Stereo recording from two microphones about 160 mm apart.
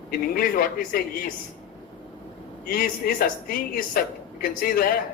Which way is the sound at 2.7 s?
70° left (ahead or behind).